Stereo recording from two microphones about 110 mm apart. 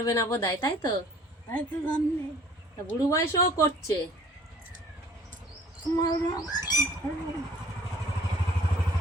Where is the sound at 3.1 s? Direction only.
25° left (ahead or behind).